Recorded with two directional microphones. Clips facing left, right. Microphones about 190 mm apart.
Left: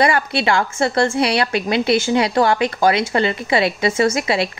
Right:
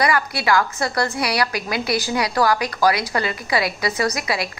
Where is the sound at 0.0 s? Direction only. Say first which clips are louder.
Left 4 dB; 25° left (ahead or behind).